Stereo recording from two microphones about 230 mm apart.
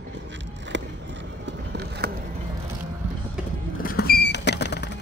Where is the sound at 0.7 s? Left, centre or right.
Right.